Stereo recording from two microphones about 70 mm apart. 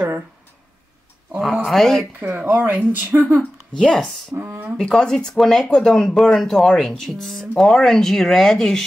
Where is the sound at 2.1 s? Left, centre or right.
Right.